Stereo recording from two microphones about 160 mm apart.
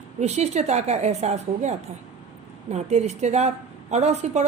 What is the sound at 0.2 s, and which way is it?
A woman's voice, 45° right (ahead or behind).